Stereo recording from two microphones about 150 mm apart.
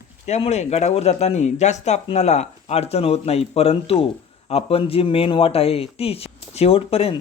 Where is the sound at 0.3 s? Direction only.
45° left (ahead or behind).